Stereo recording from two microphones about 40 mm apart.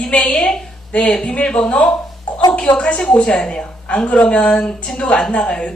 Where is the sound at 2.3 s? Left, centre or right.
Left.